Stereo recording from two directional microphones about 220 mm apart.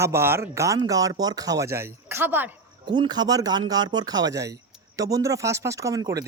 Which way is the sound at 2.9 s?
20° right (ahead or behind).